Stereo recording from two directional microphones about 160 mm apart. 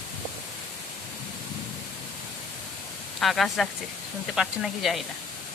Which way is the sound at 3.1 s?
Centre (ahead or behind).